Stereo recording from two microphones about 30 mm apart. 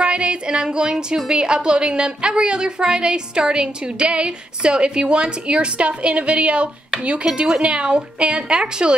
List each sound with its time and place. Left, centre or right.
0.0 s a woman's voice: right; by 1.3 s centre
1.3 s a woman's voice: right